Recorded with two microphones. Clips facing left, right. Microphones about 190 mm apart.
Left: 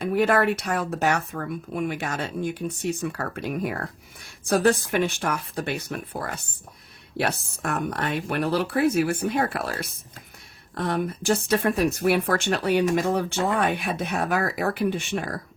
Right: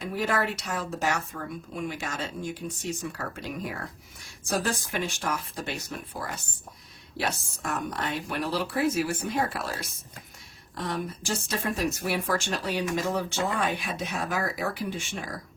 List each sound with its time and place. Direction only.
0.0 s speech: 60° left (ahead or behind)